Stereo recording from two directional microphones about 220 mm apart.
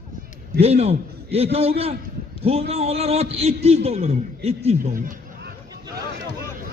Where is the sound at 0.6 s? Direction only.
30° right (ahead or behind).